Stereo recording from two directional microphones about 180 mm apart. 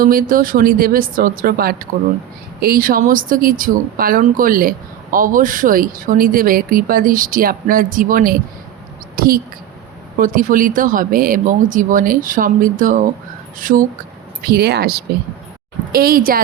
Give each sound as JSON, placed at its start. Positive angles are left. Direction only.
{"t": 0.0, "sound": "speech", "side_deg": -50}
{"t": 9.1, "sound": "a sound", "side_deg": -55}
{"t": 10.2, "sound": "speech", "side_deg": -50}
{"t": 14.4, "sound": "speech", "side_deg": -60}